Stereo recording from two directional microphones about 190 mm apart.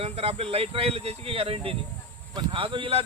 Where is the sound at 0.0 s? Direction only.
30° right (ahead or behind).